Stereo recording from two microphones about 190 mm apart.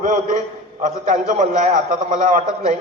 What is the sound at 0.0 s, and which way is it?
A man's voice, 40° right (ahead or behind).